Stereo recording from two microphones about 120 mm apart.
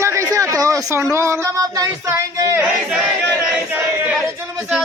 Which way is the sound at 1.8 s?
25° right (ahead or behind).